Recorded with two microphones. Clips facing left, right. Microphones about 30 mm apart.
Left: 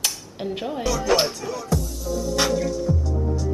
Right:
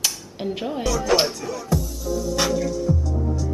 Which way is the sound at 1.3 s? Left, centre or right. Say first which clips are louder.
Right 1 dB; centre.